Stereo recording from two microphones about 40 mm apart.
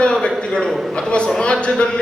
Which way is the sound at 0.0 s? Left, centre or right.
Centre.